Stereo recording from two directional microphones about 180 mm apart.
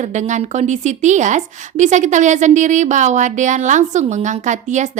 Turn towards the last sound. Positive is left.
turn(degrees=-40)  # may be behind; listen again after turning